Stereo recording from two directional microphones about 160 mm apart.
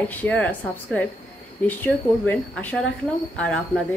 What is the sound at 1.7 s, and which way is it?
Speech, 10° left (ahead or behind).